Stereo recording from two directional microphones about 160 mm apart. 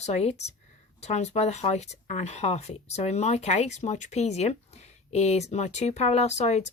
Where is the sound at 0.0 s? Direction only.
40° left (ahead or behind).